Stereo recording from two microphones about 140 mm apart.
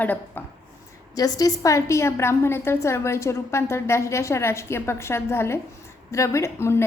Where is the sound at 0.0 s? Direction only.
10° left (ahead or behind).